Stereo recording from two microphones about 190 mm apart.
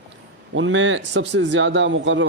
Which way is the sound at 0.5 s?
85° right.